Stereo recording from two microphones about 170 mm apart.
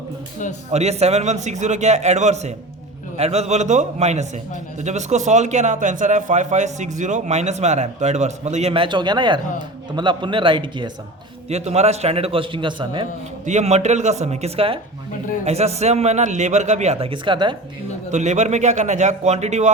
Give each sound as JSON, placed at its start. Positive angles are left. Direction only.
{"t": 0.7, "sound": "a man's voice", "side_deg": -40}
{"t": 11.4, "sound": "speech", "side_deg": -40}
{"t": 13.4, "sound": "speech", "side_deg": -45}
{"t": 18.1, "sound": "a man's voice", "side_deg": -45}